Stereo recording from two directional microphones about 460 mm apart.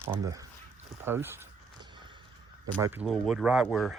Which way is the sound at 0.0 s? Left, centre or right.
Centre.